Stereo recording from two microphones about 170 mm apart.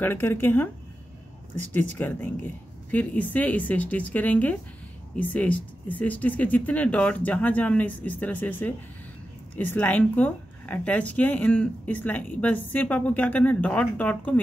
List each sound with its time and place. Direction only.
0.0 s speech: 10° left (ahead or behind)